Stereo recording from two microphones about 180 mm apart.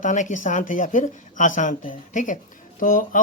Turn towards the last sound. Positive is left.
turn(degrees=50)  # may be behind; listen again after turning